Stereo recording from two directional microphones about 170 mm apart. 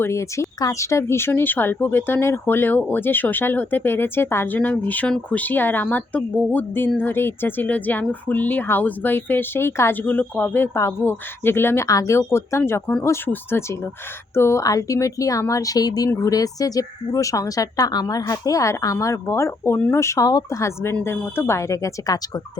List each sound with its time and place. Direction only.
0.0 s speech: 15° left (ahead or behind)